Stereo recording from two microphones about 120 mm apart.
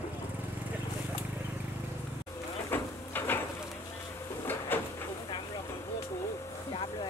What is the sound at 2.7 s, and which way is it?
Printer, 15° left (ahead or behind).